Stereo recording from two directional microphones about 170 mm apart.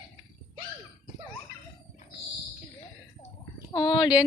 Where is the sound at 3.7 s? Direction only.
25° left (ahead or behind).